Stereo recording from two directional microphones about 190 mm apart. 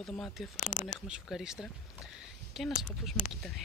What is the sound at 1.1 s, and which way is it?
Speech, centre (ahead or behind).